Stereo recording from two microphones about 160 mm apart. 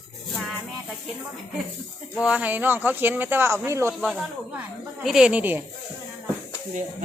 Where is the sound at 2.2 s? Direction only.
10° right (ahead or behind).